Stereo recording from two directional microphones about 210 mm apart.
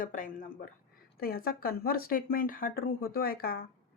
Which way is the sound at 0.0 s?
40° left (ahead or behind).